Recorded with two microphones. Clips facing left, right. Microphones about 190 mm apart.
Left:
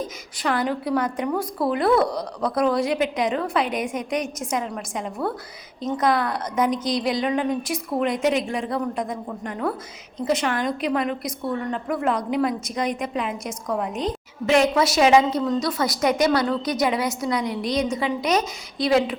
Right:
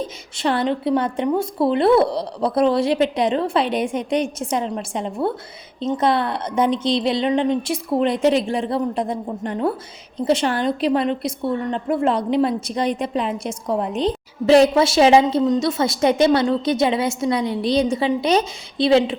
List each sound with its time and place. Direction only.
0.0 s a woman's voice: 30° right (ahead or behind)